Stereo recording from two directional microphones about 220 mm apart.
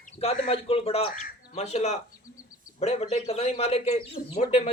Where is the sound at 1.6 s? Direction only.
30° left (ahead or behind).